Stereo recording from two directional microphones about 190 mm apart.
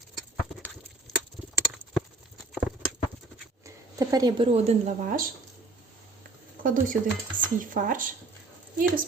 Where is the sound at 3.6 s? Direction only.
20° right (ahead or behind); by 5.3 s 45° right (ahead or behind).